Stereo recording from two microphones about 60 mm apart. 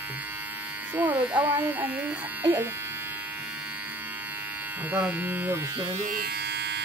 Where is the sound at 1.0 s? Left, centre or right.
Right.